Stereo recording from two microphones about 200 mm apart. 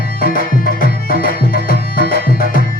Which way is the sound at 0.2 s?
45° left (ahead or behind).